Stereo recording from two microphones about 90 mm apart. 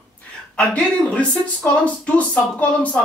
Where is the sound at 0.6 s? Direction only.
15° left (ahead or behind).